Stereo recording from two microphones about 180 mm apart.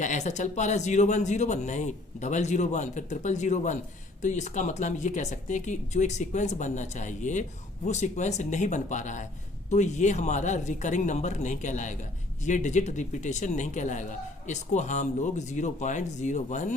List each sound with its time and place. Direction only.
0.0 s speech: 40° left (ahead or behind)